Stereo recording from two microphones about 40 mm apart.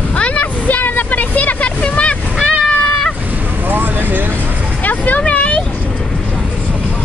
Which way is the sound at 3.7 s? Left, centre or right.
Right.